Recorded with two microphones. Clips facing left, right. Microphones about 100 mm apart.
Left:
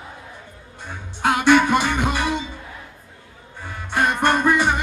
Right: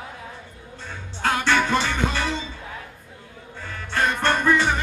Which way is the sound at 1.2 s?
15° left (ahead or behind).